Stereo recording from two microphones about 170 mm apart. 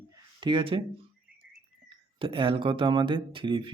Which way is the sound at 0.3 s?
30° right (ahead or behind).